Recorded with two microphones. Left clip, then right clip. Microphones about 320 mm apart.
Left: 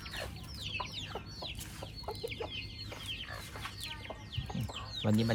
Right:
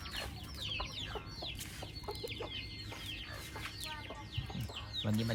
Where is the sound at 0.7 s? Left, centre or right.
Left.